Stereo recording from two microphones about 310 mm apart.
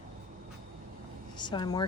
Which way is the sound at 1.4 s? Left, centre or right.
Centre.